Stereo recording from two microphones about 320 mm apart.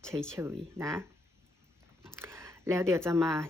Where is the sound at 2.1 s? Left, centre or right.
Centre.